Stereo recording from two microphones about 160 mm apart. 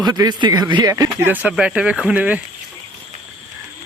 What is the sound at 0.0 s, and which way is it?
Speech, 25° right (ahead or behind).